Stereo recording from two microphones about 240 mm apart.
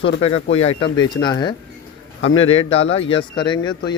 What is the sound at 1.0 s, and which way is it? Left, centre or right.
Speech, centre.